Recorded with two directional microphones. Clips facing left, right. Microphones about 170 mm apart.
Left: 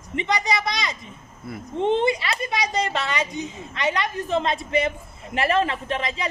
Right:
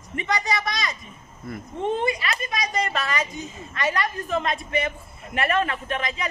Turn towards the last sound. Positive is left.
turn(degrees=25)  # may be behind; listen again after turning